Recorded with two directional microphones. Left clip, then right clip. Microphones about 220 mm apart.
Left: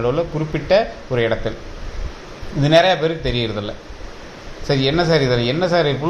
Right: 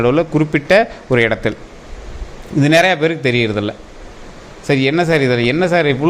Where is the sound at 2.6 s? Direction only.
40° right (ahead or behind).